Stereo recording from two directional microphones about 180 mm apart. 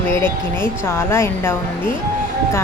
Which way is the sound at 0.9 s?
15° left (ahead or behind).